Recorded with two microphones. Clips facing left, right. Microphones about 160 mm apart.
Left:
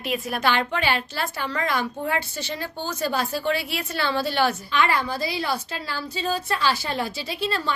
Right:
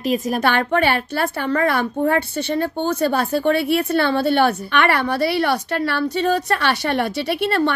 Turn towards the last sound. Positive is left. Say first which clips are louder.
# right 9 dB
turn(degrees=-65)  # may be behind; listen again after turning